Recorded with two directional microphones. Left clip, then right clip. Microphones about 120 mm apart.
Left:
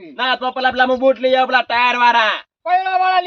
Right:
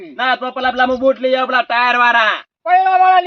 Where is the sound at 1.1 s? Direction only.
85° left.